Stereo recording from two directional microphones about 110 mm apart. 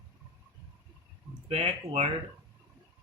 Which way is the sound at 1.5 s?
70° right (ahead or behind).